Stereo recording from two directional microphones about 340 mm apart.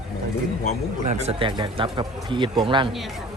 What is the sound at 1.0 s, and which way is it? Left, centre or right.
Speech, centre.